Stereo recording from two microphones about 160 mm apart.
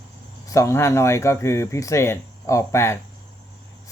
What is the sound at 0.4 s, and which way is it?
Speech, 20° left (ahead or behind).